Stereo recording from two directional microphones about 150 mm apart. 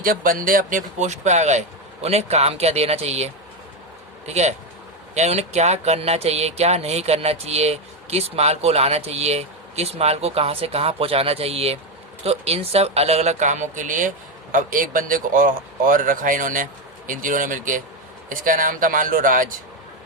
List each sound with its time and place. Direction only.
0.0 s a man's voice: 70° right (ahead or behind)